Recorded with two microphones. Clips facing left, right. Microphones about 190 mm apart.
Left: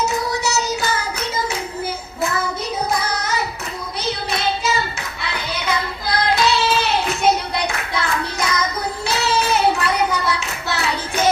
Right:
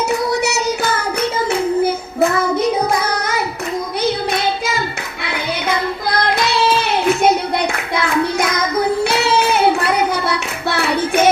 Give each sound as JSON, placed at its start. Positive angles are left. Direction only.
{"t": 2.2, "sound": "child singing", "side_deg": -60}
{"t": 6.2, "sound": "child singing", "side_deg": -60}
{"t": 9.0, "sound": "child singing", "side_deg": -60}
{"t": 10.1, "sound": "hands", "side_deg": -60}